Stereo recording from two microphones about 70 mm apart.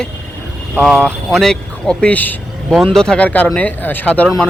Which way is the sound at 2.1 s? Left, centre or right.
Left.